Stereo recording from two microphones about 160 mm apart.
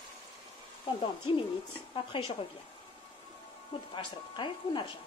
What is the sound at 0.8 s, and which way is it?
Speech, 35° left (ahead or behind).